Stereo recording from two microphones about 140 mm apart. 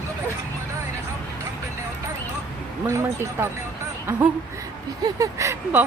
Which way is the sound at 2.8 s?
20° right (ahead or behind).